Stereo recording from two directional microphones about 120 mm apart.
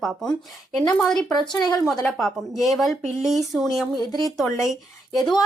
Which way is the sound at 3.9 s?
40° right (ahead or behind).